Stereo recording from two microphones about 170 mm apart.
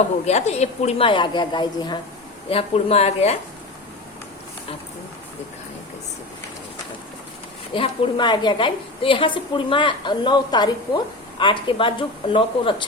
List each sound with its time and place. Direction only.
0.3 s a woman's voice: 40° left (ahead or behind)
2.5 s a woman's voice: 35° left (ahead or behind)
7.7 s a woman's voice: 30° left (ahead or behind)